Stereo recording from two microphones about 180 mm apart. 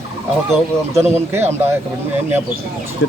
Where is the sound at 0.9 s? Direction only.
15° right (ahead or behind).